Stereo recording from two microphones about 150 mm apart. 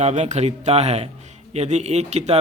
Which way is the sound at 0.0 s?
50° right (ahead or behind).